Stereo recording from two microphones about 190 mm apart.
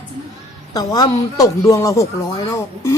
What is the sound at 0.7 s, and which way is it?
A woman's voice, 20° left (ahead or behind).